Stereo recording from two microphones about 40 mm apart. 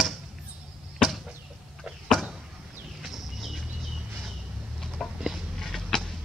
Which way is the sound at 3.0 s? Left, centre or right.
Centre.